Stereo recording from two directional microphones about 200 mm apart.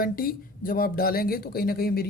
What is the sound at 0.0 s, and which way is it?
Speech, 45° left (ahead or behind).